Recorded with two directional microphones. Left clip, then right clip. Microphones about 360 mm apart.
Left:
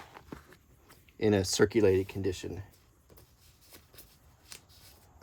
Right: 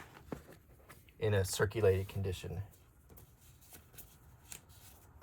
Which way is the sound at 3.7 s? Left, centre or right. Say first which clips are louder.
Left 4 dB; centre.